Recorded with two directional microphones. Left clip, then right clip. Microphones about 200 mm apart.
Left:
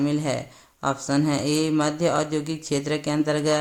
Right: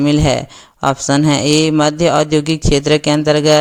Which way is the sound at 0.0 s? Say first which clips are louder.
Right 11 dB; 40° right (ahead or behind).